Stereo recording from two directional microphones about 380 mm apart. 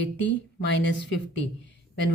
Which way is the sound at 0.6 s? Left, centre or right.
Left.